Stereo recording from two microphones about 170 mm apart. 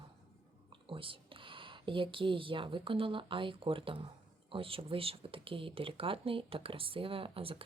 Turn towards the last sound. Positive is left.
turn(degrees=-35)  # may be behind; listen again after turning